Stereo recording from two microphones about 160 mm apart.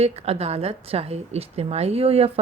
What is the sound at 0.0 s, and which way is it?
Speech, 40° right (ahead or behind).